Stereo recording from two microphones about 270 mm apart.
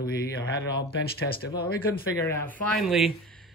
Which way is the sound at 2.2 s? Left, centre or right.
Centre.